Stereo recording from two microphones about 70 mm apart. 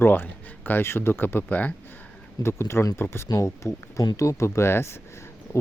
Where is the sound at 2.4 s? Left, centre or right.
Left.